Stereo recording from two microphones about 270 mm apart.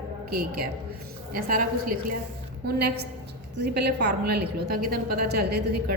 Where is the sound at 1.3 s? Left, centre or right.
Right.